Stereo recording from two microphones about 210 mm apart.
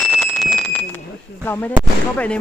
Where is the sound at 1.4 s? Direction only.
10° left (ahead or behind).